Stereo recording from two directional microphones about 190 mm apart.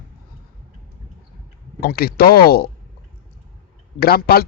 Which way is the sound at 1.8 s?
55° left (ahead or behind).